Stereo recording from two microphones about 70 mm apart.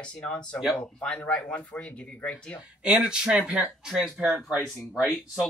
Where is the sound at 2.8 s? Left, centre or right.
Centre.